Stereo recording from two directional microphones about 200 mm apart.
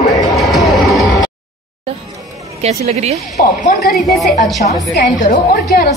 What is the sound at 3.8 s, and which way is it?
Speech, centre (ahead or behind).